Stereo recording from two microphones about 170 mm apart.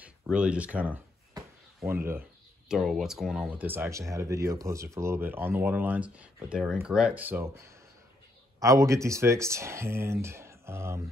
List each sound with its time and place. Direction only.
0.0 s speech: 5° right (ahead or behind)
2.7 s speech: centre (ahead or behind); by 11.0 s 15° right (ahead or behind)